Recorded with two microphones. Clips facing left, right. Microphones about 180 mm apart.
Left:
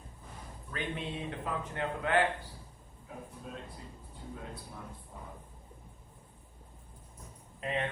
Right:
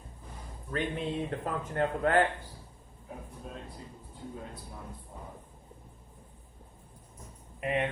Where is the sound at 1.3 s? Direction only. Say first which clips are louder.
Right 3 dB; 45° right (ahead or behind).